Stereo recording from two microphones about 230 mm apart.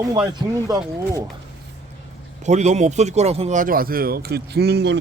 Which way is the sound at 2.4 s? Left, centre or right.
Right.